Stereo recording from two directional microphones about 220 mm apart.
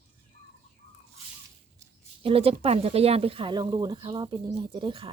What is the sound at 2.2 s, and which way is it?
Speech, 25° right (ahead or behind).